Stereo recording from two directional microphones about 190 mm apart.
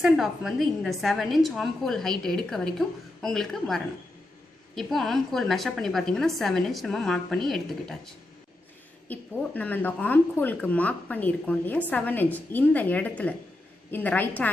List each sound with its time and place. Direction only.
0.0 s a woman's voice: centre (ahead or behind)